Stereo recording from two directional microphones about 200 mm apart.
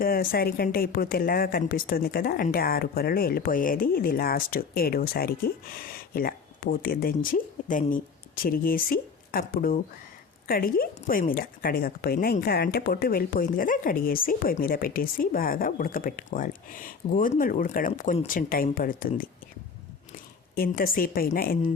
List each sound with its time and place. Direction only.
0.0 s a woman's voice: 45° left (ahead or behind)
20.6 s a woman's voice: 45° left (ahead or behind)